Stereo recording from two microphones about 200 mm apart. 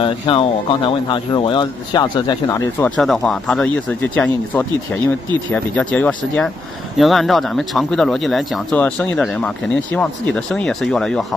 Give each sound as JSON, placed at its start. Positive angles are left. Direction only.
{"t": 0.0, "sound": "speech", "side_deg": 25}
{"t": 3.0, "sound": "speech", "side_deg": 0}